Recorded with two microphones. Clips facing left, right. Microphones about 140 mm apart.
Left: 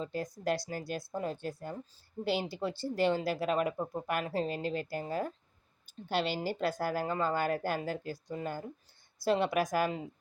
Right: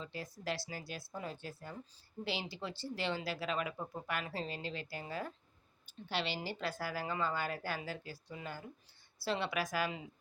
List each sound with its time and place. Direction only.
0.0 s a woman's voice: 45° left (ahead or behind)